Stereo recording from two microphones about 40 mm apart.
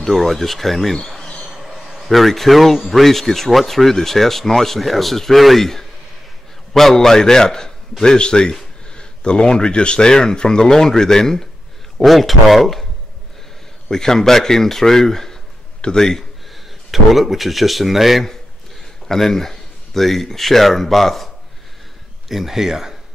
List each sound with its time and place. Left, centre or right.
0.0 s speech: centre
1.7 s a sound: centre
2.0 s a man's voice: centre
12.0 s speech: centre
13.8 s a man's voice: centre
16.9 s speech: centre
19.0 s speech: centre
22.3 s speech: centre